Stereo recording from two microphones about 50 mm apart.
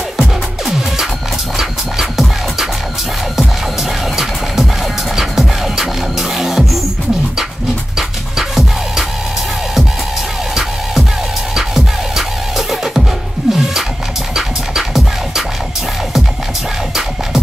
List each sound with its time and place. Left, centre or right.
0.2 s music: centre
5.1 s music: centre
8.4 s music: centre
11.5 s music: centre
14.3 s scratching: centre